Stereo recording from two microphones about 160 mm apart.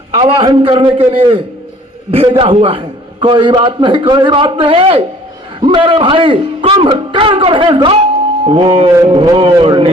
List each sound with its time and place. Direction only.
0.1 s a man's voice: 35° right (ahead or behind)